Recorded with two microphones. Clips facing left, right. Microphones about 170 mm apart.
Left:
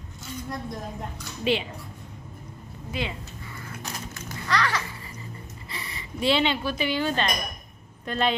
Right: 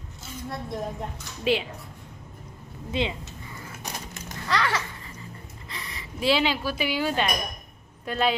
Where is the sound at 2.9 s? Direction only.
20° right (ahead or behind).